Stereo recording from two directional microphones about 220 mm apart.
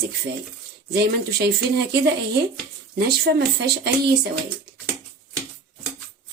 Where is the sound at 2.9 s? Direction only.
45° right (ahead or behind).